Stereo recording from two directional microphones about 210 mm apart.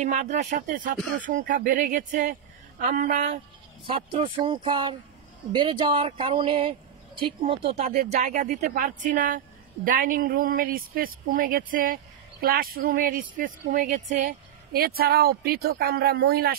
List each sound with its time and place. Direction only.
0.0 s speech: 35° right (ahead or behind)
3.8 s a woman's voice: 25° right (ahead or behind); by 16.5 s 45° right (ahead or behind)